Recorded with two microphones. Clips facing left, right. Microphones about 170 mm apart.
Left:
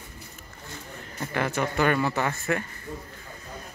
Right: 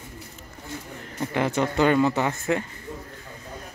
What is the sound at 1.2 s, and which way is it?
Speech, 20° right (ahead or behind).